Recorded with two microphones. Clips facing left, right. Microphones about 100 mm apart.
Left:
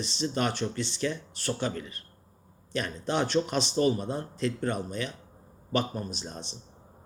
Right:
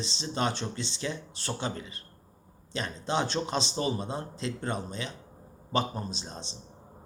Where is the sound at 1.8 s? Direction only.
50° left (ahead or behind).